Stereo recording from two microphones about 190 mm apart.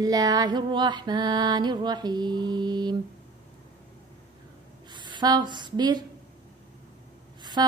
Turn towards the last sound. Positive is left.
turn(degrees=-20)  # may be behind; listen again after turning